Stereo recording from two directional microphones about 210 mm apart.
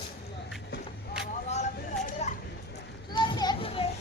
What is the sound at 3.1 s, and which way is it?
Children playing, 20° left (ahead or behind).